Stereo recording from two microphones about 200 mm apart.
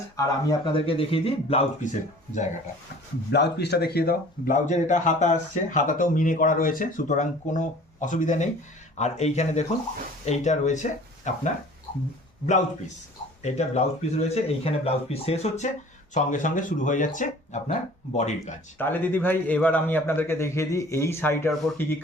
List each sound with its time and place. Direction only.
0.2 s speech: 20° left (ahead or behind); by 2.5 s 40° left (ahead or behind)
3.3 s speech: 55° left (ahead or behind); by 11.4 s 35° left (ahead or behind)
13.4 s speech: 35° left (ahead or behind)
18.8 s a man's voice: 10° left (ahead or behind)